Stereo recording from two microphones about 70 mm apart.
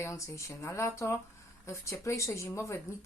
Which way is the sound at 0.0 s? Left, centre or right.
Left.